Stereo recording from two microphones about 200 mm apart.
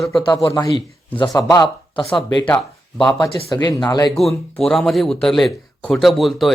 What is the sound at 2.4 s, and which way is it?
Speech, 5° left (ahead or behind).